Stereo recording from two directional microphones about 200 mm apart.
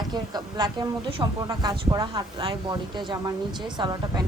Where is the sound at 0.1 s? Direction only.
20° right (ahead or behind).